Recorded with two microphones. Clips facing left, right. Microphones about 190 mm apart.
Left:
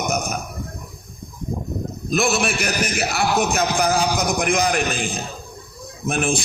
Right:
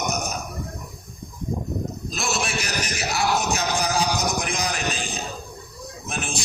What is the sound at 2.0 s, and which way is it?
A man's voice, 60° left (ahead or behind).